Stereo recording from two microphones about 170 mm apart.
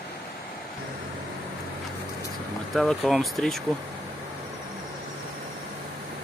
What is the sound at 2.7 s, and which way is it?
Speech, centre (ahead or behind).